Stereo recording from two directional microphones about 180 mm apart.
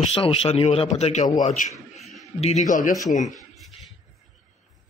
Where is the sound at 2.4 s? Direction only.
40° left (ahead or behind).